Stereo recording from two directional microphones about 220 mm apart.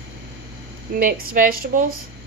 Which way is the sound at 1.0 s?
40° right (ahead or behind).